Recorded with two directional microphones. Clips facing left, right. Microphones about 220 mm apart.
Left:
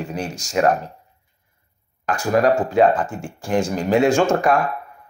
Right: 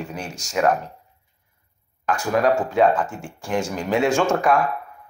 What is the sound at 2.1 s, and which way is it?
Speech, 35° left (ahead or behind).